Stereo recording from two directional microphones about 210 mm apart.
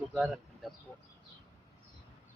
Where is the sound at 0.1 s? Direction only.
Centre (ahead or behind).